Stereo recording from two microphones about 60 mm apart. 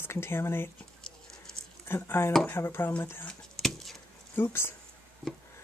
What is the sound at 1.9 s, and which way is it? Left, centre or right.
Speech, left.